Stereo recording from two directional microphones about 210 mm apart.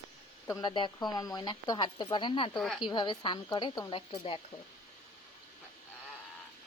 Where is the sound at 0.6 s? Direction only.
20° left (ahead or behind).